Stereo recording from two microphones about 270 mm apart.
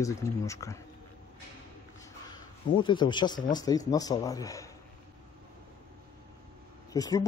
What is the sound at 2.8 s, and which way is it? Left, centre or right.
Speech, centre.